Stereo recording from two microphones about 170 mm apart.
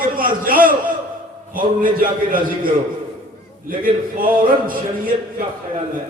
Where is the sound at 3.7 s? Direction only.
55° right (ahead or behind).